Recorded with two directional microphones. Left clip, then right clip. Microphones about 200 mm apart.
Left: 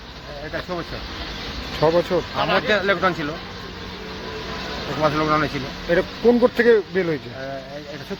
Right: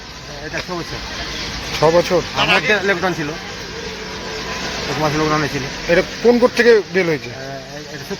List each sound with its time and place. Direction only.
1.8 s speech: centre (ahead or behind)
2.4 s speech: 35° left (ahead or behind)
2.6 s speech: 20° left (ahead or behind)
5.0 s speech: 20° left (ahead or behind)
5.9 s speech: centre (ahead or behind)